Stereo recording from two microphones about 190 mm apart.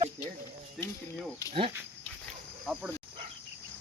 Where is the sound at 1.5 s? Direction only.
30° right (ahead or behind).